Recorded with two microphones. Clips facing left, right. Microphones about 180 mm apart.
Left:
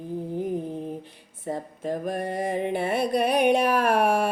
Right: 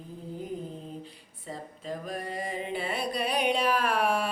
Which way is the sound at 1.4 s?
55° left (ahead or behind).